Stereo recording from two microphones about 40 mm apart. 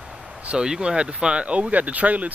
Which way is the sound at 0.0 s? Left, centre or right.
Centre.